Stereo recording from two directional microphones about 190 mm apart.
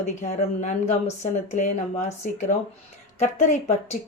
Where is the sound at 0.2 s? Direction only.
35° left (ahead or behind).